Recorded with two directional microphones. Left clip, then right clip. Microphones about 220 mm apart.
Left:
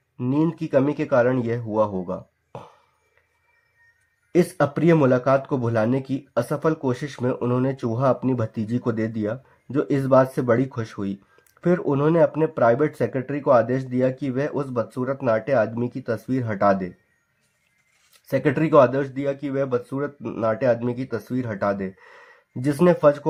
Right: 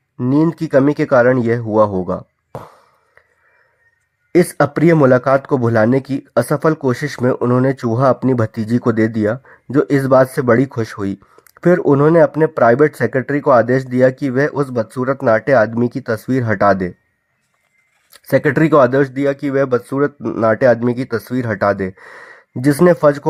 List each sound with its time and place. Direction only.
0.2 s speech: 30° right (ahead or behind)
4.3 s speech: 35° right (ahead or behind)
18.3 s speech: 40° right (ahead or behind)